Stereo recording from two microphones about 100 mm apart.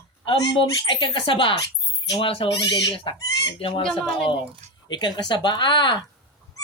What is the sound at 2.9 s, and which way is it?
Speech, 55° left (ahead or behind).